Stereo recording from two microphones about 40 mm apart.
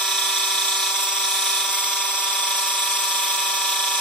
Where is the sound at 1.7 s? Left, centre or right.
Left.